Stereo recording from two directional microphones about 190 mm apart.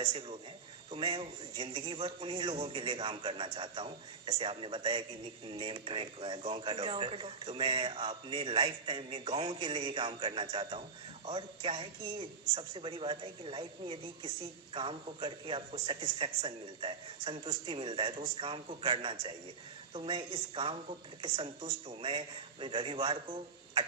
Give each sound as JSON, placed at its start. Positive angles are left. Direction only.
{"t": 0.0, "sound": "a woman's voice", "side_deg": -25}